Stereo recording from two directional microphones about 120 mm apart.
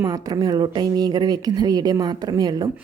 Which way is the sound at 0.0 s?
30° right (ahead or behind).